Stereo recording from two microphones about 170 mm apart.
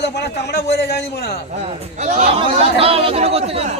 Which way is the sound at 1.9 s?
45° right (ahead or behind).